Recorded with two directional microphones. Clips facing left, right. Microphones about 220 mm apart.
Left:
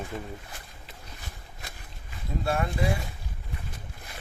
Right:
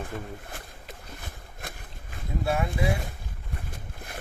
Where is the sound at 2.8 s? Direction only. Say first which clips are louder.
Right 1 dB; 55° right (ahead or behind).